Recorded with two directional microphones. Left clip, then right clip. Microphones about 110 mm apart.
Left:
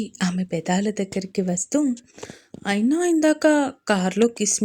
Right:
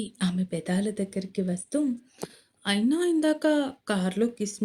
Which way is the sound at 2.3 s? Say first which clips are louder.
Left 4 dB; 65° left (ahead or behind).